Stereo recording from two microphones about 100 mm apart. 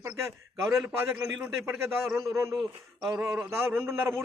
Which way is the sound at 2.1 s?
30° right (ahead or behind).